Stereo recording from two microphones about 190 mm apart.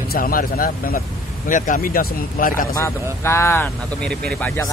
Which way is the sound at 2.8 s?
15° left (ahead or behind).